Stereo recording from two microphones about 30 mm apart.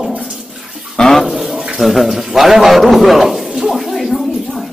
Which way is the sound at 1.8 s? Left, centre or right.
Centre.